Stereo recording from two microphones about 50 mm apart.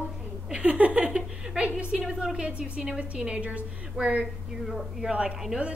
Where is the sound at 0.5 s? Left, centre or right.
Right.